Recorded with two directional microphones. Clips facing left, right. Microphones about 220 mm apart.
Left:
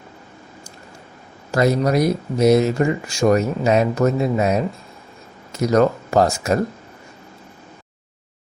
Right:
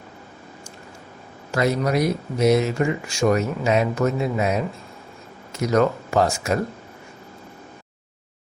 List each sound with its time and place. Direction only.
1.5 s speech: 40° left (ahead or behind)